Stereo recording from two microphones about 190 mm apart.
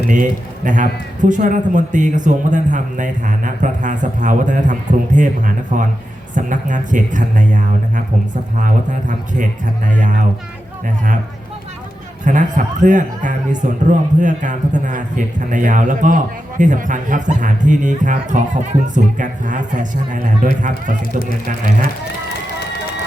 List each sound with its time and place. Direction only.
0.1 s a man's voice: 40° right (ahead or behind)
12.2 s a man's voice: 40° right (ahead or behind)